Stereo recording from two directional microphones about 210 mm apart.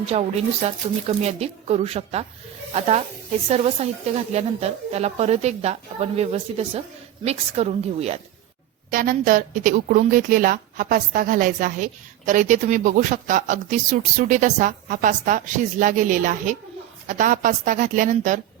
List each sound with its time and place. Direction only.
0.1 s a woman's voice: 30° right (ahead or behind)
8.9 s a woman's voice: 40° right (ahead or behind)